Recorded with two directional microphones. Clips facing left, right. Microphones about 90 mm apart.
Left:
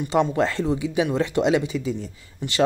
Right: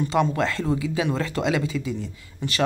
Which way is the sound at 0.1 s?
25° left (ahead or behind).